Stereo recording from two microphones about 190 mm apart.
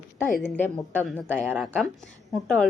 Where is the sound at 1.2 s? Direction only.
10° right (ahead or behind).